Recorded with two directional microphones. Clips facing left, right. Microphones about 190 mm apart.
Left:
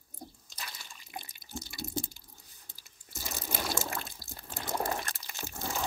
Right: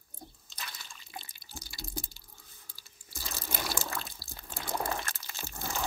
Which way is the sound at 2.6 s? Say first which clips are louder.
Even; 20° left (ahead or behind).